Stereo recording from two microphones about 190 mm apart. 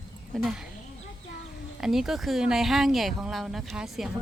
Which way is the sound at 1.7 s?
Centre (ahead or behind).